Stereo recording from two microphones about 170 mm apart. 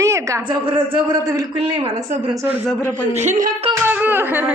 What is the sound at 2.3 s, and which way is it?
Speech, 10° right (ahead or behind).